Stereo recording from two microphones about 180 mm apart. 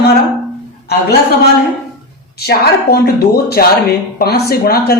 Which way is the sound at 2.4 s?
60° left (ahead or behind).